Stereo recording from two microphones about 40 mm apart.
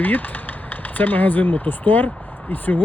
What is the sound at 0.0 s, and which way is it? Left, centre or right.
Speech, left.